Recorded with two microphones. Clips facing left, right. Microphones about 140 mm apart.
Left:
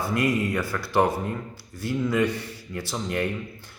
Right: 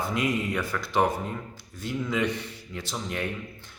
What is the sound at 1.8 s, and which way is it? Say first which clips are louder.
Speech: left 4 dB; 5° left (ahead or behind).